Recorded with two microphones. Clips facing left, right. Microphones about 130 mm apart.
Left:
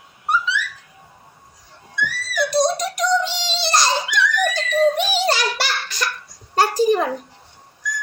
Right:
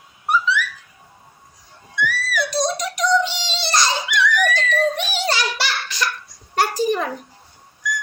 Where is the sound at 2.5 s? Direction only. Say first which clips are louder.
Left 6 dB; 40° left (ahead or behind).